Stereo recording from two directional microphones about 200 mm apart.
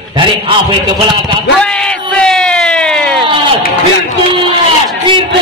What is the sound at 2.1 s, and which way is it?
Speech, 5° left (ahead or behind).